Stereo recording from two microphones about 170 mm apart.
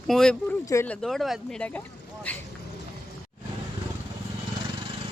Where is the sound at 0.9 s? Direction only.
Centre (ahead or behind).